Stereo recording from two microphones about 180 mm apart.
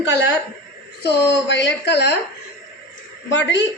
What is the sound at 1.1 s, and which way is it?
A woman's voice, 75° left (ahead or behind).